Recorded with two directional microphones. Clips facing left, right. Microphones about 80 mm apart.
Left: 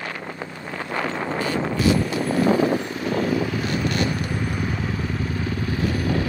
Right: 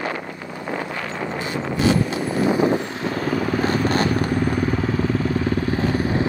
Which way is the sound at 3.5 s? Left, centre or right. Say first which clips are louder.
Right 5 dB; right.